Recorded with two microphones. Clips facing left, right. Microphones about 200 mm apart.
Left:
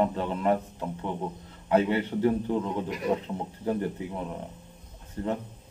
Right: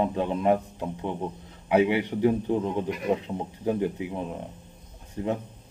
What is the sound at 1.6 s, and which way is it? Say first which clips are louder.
Speech: right 2 dB; 15° right (ahead or behind).